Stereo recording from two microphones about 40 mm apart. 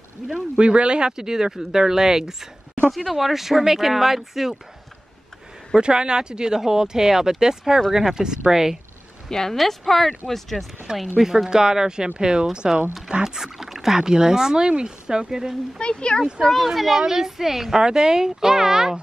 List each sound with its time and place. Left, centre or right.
0.3 s speech: right; by 4.6 s centre
5.8 s speech: right
9.3 s speech: centre
11.1 s speech: centre
15.8 s speech: left
16.7 s speech: centre